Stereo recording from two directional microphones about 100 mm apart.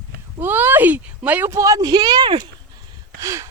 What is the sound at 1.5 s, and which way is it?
Speech, 35° right (ahead or behind).